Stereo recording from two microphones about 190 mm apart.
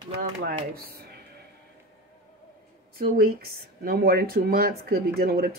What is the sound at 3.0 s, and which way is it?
Speech, 55° right (ahead or behind).